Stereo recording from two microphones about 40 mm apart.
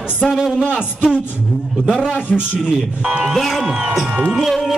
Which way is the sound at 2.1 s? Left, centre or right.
Left.